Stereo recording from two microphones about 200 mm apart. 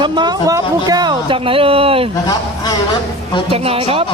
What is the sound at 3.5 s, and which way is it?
Speech, 30° right (ahead or behind).